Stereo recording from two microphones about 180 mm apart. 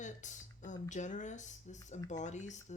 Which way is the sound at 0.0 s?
45° left (ahead or behind).